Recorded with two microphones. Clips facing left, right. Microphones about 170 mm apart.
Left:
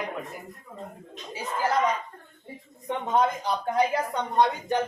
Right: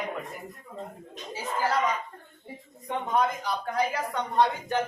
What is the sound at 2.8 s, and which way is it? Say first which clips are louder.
Speech: left 2 dB; 25° left (ahead or behind).